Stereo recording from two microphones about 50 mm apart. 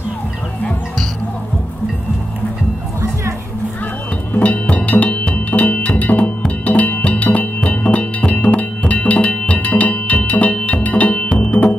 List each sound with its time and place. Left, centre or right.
4.3 s music: left